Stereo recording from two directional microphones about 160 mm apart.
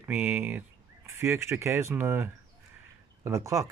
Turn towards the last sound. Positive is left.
turn(degrees=-20)  # may be behind; listen again after turning